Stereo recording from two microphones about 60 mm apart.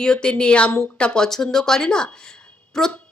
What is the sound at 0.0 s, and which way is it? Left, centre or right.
Speech, centre.